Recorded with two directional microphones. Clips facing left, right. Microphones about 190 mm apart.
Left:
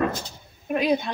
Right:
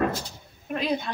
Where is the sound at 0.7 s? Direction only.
15° left (ahead or behind).